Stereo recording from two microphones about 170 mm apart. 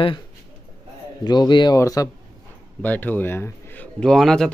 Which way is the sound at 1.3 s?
25° left (ahead or behind).